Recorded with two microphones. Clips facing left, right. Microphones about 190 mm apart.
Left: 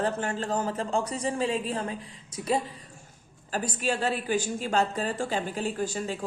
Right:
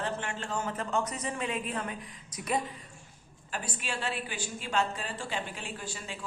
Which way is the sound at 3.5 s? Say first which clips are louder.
Left 8 dB; 40° left (ahead or behind).